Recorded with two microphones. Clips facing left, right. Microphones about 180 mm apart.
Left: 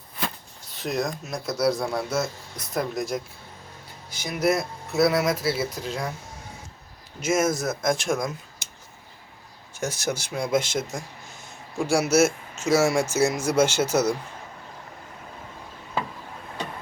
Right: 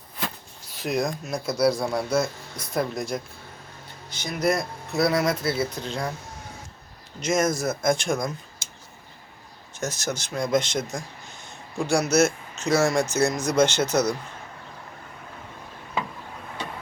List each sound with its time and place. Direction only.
0.8 s speech: centre (ahead or behind)
7.2 s speech: 5° left (ahead or behind)
9.7 s speech: 10° left (ahead or behind)